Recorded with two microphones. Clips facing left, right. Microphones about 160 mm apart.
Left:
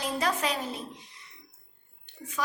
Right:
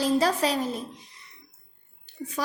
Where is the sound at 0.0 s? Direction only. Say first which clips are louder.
Right 6 dB; 35° right (ahead or behind).